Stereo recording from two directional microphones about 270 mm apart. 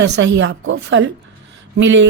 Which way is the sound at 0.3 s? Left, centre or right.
Right.